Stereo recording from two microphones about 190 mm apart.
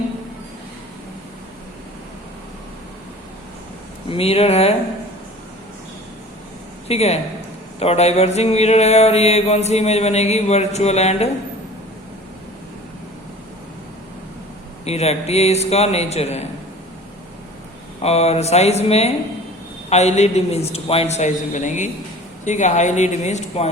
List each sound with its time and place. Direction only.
4.1 s mantra: 30° left (ahead or behind)
6.8 s a man's voice: 35° left (ahead or behind)
7.8 s mantra: 35° left (ahead or behind)
14.8 s mantra: 35° left (ahead or behind)
18.0 s mantra: 35° left (ahead or behind)